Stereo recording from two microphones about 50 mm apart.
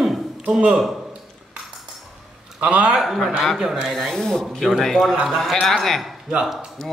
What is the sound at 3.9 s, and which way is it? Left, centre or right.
A man's voice, centre.